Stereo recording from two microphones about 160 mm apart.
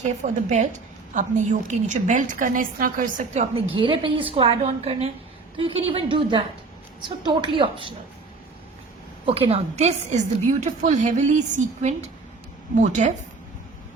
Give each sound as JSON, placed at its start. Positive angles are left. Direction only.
{"t": 0.0, "sound": "a woman's voice", "side_deg": -45}
{"t": 3.5, "sound": "a woman's voice", "side_deg": -30}
{"t": 9.2, "sound": "a woman's voice", "side_deg": -35}